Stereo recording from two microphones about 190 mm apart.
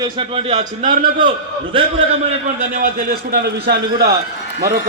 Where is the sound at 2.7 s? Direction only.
50° right (ahead or behind).